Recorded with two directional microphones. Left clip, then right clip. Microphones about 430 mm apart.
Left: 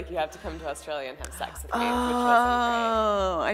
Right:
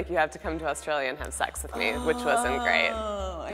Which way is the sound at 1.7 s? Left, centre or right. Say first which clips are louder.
Left 4 dB; left.